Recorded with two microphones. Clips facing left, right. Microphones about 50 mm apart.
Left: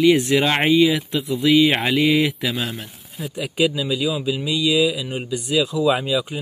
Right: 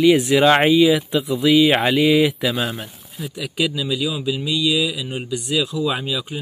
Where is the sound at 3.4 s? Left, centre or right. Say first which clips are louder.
Left 2 dB; centre.